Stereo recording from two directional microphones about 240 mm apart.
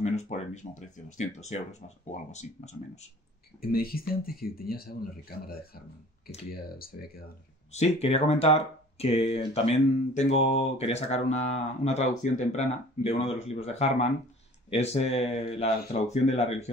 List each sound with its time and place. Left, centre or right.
0.0 s speech: left
3.7 s speech: left
6.2 s speech: left
7.7 s speech: left